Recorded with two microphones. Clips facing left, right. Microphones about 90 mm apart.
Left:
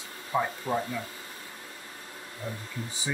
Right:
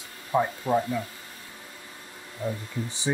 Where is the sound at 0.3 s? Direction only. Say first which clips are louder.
Right 4 dB; 10° right (ahead or behind).